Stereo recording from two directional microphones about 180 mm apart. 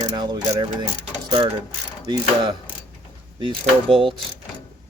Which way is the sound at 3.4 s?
30° right (ahead or behind).